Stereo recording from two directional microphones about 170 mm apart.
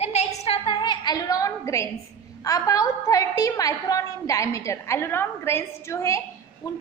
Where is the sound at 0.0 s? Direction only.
40° left (ahead or behind); by 1.9 s 15° left (ahead or behind).